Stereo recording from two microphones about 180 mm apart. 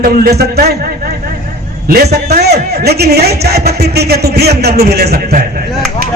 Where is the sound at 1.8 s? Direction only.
60° right (ahead or behind).